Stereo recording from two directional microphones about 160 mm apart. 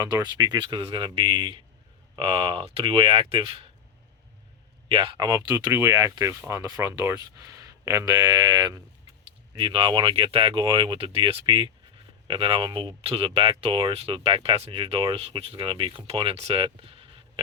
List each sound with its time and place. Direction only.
0.0 s speech: 25° right (ahead or behind)
4.9 s speech: 35° right (ahead or behind)